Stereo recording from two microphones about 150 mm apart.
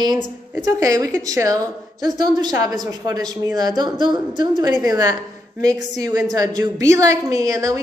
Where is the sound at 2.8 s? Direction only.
25° right (ahead or behind).